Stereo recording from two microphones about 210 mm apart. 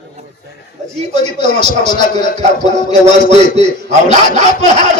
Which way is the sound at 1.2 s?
30° right (ahead or behind).